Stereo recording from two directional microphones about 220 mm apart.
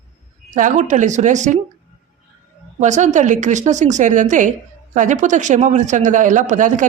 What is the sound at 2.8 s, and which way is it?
A man's voice, 35° right (ahead or behind).